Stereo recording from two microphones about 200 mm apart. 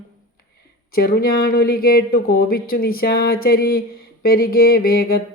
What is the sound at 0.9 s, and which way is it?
Speech, 50° left (ahead or behind).